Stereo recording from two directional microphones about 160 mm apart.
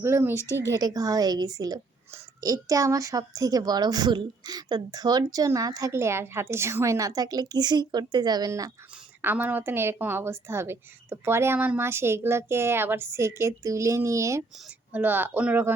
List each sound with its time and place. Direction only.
0.0 s a woman's voice: 15° right (ahead or behind)
9.2 s a woman's voice: 10° right (ahead or behind)